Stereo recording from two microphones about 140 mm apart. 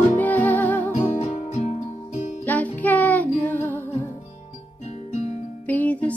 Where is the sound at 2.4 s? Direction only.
10° left (ahead or behind).